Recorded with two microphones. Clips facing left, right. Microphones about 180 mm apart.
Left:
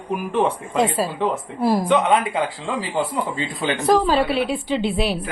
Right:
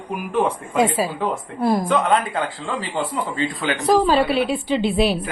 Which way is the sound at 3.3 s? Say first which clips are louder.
Right 1 dB; 15° left (ahead or behind).